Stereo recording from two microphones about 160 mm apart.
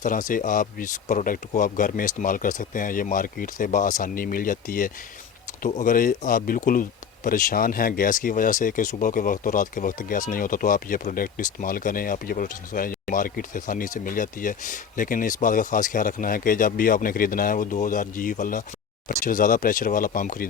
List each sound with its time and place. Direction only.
0.0 s speech: 55° left (ahead or behind)